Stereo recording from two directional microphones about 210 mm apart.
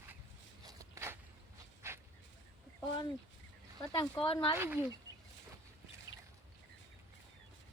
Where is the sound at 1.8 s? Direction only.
10° right (ahead or behind).